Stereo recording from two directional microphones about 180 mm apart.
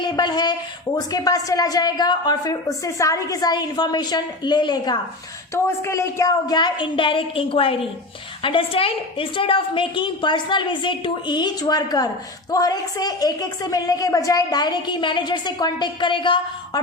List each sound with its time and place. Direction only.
0.0 s a woman's voice: 25° left (ahead or behind)